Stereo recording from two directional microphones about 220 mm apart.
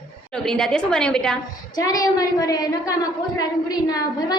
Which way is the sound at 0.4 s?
5° left (ahead or behind).